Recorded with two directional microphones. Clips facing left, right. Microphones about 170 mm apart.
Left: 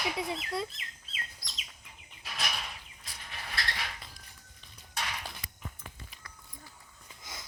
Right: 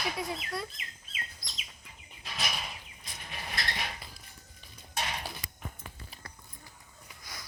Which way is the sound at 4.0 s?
5° right (ahead or behind).